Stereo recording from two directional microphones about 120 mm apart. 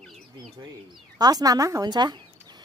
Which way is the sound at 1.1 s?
35° right (ahead or behind).